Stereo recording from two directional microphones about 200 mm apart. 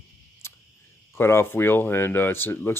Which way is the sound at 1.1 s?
15° left (ahead or behind).